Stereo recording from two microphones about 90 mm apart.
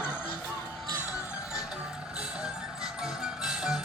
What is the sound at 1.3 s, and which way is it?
Music, 10° right (ahead or behind).